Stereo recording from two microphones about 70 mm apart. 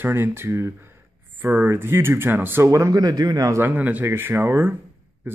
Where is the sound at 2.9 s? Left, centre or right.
Right.